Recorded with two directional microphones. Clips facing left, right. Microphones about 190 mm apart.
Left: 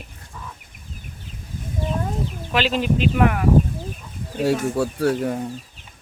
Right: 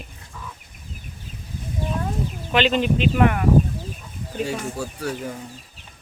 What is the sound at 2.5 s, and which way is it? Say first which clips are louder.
Speech: right 1 dB; 5° left (ahead or behind).